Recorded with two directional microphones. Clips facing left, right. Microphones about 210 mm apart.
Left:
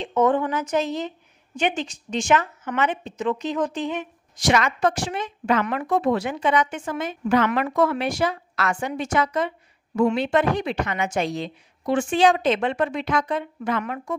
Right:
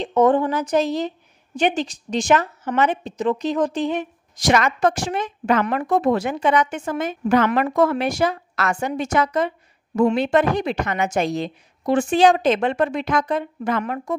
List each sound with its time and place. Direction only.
0.0 s a woman's voice: 35° right (ahead or behind)